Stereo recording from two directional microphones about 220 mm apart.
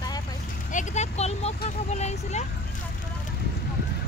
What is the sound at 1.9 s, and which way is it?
Speech, 30° left (ahead or behind).